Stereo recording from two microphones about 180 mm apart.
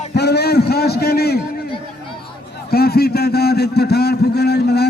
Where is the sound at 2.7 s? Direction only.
60° left (ahead or behind).